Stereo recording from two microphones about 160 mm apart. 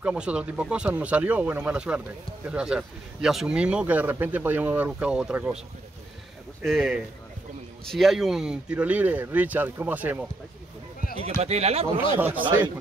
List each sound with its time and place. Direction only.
0.0 s speech: 5° right (ahead or behind)
6.6 s speech: centre (ahead or behind)
11.2 s speech: 40° right (ahead or behind)
12.2 s speech: 10° right (ahead or behind)